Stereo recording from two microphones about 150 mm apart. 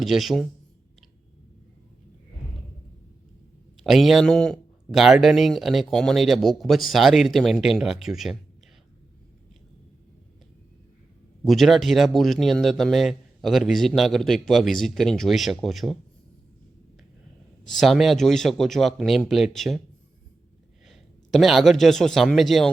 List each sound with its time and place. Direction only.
0.0 s speech: centre (ahead or behind)
3.8 s speech: centre (ahead or behind)
11.4 s speech: centre (ahead or behind)
17.7 s speech: centre (ahead or behind)
20.8 s speech: centre (ahead or behind)